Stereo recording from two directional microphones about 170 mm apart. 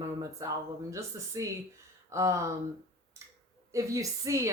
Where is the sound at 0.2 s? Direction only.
20° right (ahead or behind).